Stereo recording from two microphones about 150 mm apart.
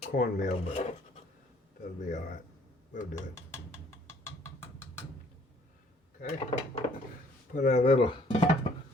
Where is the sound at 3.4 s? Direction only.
15° left (ahead or behind).